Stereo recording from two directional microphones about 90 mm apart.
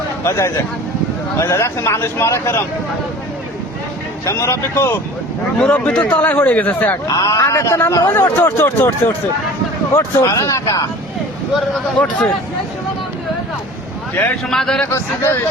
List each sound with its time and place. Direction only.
0.3 s a man's voice: 30° left (ahead or behind)
4.3 s a man's voice: 35° left (ahead or behind)
5.5 s speech: 15° left (ahead or behind)
7.1 s a man's voice: 45° left (ahead or behind)
8.1 s speech: 25° left (ahead or behind)
9.9 s a man's voice: 35° left (ahead or behind)
12.0 s speech: 15° left (ahead or behind)
14.2 s speech: 20° left (ahead or behind)
14.5 s a man's voice: 5° left (ahead or behind)
14.8 s speech: 30° left (ahead or behind)